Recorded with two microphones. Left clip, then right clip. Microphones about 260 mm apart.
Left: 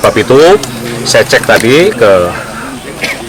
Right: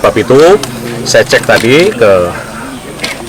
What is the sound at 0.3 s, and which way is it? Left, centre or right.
Speech, right.